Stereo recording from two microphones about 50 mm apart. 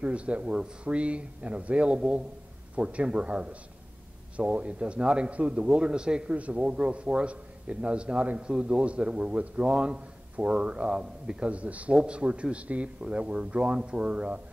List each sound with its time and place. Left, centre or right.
0.0 s a man's voice: right